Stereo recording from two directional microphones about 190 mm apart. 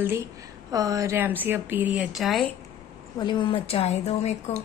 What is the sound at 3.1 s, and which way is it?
A woman's voice, 25° left (ahead or behind).